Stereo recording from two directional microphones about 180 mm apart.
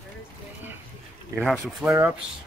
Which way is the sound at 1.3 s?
Centre (ahead or behind).